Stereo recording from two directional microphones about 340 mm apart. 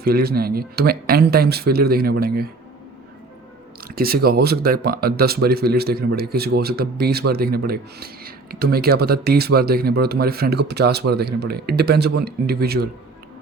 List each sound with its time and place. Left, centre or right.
0.0 s speech: right
3.8 s speech: right